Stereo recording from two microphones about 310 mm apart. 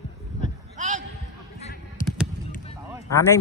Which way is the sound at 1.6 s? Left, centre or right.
Left.